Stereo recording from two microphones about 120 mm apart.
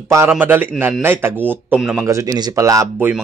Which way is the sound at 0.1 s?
20° right (ahead or behind).